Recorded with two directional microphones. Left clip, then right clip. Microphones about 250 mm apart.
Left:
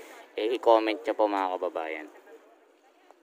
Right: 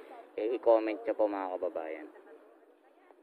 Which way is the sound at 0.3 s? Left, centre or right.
Left.